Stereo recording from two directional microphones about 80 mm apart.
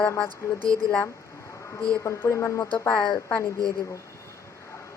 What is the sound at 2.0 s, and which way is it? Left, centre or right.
Speech, left.